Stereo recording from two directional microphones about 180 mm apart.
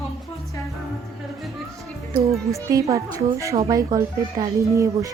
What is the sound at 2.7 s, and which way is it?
Speech, 20° right (ahead or behind).